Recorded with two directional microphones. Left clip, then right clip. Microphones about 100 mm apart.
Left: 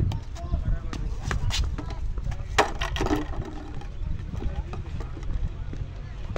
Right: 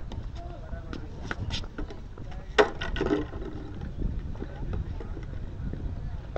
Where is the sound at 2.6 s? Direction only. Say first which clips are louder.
Even; 20° left (ahead or behind).